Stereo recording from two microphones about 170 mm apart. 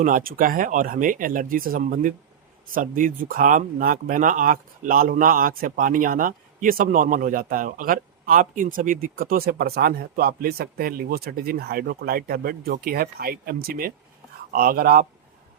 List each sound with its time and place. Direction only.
0.0 s speech: 55° right (ahead or behind)